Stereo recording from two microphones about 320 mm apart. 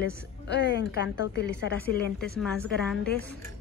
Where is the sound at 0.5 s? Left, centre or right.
Left.